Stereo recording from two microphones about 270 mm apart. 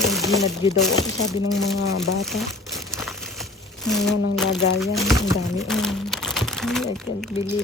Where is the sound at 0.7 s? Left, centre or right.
Left.